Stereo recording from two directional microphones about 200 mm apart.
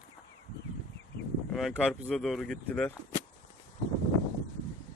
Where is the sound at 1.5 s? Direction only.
Centre (ahead or behind).